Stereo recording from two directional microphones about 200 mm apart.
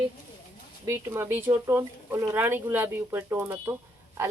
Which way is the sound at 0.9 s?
10° right (ahead or behind).